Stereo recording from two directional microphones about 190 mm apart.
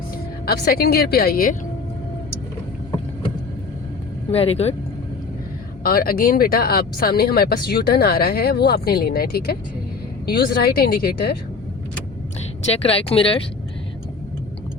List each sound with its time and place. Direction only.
0.4 s speech: 55° left (ahead or behind)
4.3 s speech: 30° left (ahead or behind)
5.8 s speech: 50° left (ahead or behind)
12.6 s speech: 30° left (ahead or behind)